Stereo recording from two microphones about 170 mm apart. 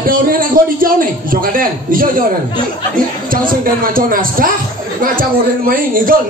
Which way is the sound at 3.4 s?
55° right (ahead or behind).